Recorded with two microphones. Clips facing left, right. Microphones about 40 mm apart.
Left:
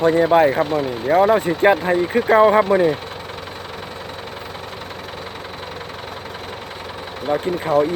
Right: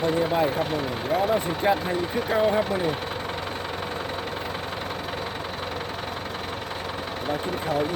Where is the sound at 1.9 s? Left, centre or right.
Left.